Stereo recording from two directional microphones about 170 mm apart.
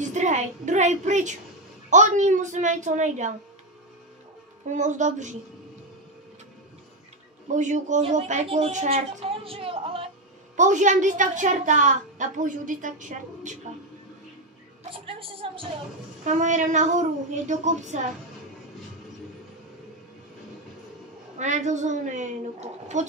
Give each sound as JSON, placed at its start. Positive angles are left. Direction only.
{"t": 0.0, "sound": "a woman's voice", "side_deg": -45}
{"t": 4.6, "sound": "a woman's voice", "side_deg": -45}
{"t": 7.5, "sound": "speech", "side_deg": -45}
{"t": 10.5, "sound": "a woman's voice", "side_deg": -45}
{"t": 14.9, "sound": "speech", "side_deg": -30}
{"t": 16.3, "sound": "a woman's voice", "side_deg": -45}
{"t": 21.4, "sound": "a woman's voice", "side_deg": -45}